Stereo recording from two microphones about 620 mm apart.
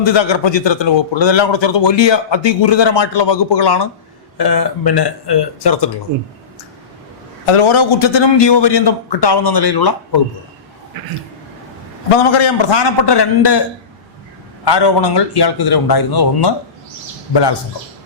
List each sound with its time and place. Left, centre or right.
0.0 s a man's voice: left
6.1 s speech: right
7.4 s a man's voice: left
12.1 s a man's voice: left
14.6 s a man's voice: left